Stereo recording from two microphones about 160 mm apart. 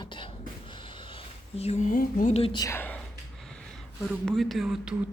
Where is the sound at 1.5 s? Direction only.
40° left (ahead or behind); by 2.3 s 55° left (ahead or behind).